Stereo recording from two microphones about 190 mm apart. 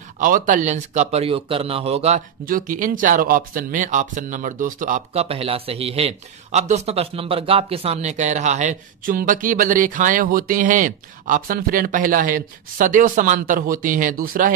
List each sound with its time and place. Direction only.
0.2 s speech: 45° right (ahead or behind)
2.4 s speech: 45° right (ahead or behind)